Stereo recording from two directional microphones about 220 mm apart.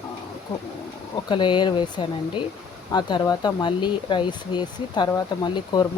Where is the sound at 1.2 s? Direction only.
20° left (ahead or behind).